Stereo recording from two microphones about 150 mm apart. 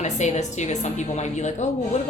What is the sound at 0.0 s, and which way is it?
A woman's voice, 50° left (ahead or behind).